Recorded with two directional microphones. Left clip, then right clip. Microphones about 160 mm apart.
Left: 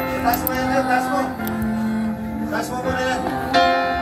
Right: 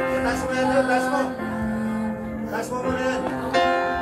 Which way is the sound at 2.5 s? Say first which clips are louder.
Left 2 dB; 35° right (ahead or behind).